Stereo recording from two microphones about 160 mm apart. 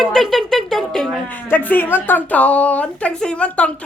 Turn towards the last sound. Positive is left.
turn(degrees=5)  # may be behind; listen again after turning